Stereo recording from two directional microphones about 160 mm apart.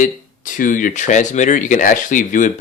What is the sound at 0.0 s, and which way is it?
Speech, 55° left (ahead or behind).